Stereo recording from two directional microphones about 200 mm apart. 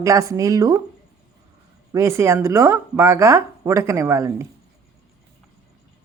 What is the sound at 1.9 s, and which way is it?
A woman's voice, 15° right (ahead or behind).